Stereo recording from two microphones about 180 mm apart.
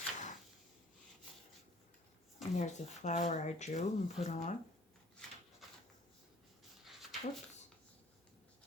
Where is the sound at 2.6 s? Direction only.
40° left (ahead or behind).